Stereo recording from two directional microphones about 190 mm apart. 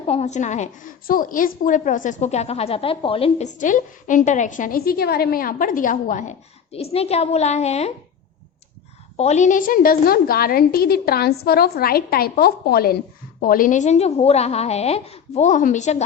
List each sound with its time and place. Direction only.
0.0 s a woman's voice: 35° left (ahead or behind)
9.1 s a woman's voice: 35° left (ahead or behind)